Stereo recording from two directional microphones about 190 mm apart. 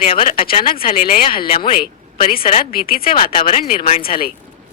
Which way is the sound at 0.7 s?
50° left (ahead or behind).